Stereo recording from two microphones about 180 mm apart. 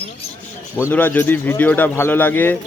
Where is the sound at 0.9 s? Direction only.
10° left (ahead or behind).